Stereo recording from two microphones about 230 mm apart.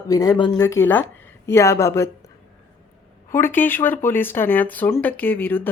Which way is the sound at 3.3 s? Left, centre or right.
Centre.